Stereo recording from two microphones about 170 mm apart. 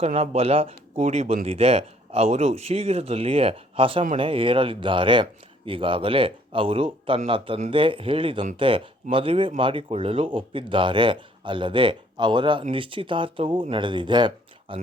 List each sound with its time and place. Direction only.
0.0 s speech: 35° right (ahead or behind)